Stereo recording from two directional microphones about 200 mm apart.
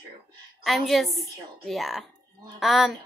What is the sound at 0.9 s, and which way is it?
Speech, centre (ahead or behind).